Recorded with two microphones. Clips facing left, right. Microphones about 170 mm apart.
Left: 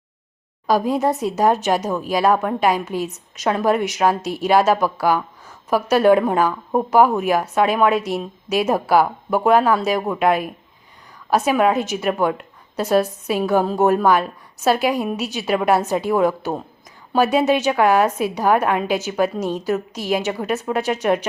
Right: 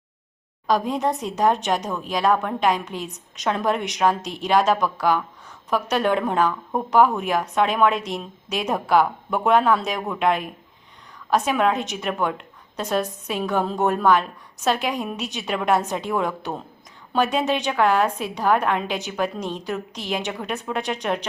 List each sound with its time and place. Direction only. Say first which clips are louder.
0.7 s a woman's voice: left 4 dB; 5° left (ahead or behind)
6.5 s speech: left 5 dB; 20° left (ahead or behind)
7.2 s a woman's voice: left 4 dB; 5° left (ahead or behind)